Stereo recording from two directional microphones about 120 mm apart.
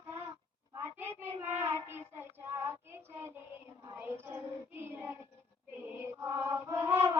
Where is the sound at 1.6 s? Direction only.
20° right (ahead or behind).